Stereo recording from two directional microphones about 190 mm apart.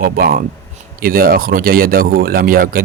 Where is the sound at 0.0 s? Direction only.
50° right (ahead or behind).